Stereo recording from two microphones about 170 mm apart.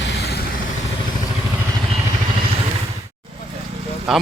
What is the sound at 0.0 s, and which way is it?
Vehicle, 75° left (ahead or behind).